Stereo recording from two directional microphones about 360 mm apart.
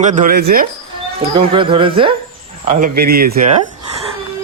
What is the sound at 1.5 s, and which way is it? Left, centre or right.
Speech, centre.